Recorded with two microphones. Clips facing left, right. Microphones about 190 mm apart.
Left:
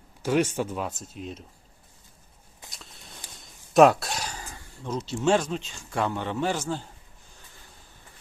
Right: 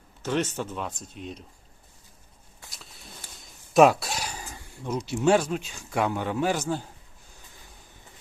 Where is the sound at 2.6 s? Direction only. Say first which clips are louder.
Left 1 dB; 20° left (ahead or behind).